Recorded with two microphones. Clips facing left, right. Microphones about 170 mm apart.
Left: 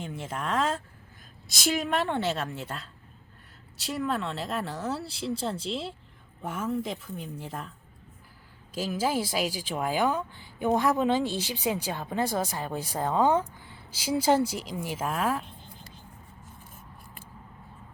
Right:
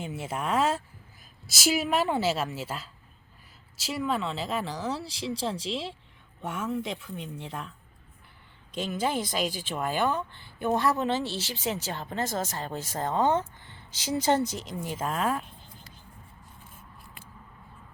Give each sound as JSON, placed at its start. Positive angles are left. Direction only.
{"t": 0.0, "sound": "speech", "side_deg": -5}
{"t": 8.7, "sound": "speech", "side_deg": 5}